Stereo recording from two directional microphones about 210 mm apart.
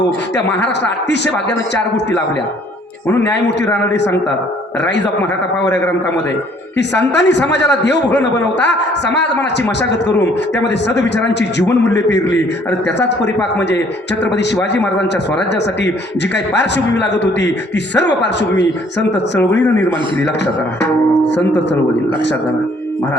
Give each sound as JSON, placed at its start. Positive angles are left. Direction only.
{"t": 0.3, "sound": "a man's voice", "side_deg": 55}
{"t": 6.7, "sound": "a man's voice", "side_deg": 55}
{"t": 21.2, "sound": "a man's voice", "side_deg": 55}